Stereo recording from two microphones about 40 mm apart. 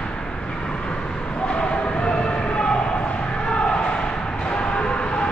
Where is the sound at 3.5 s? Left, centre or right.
Left.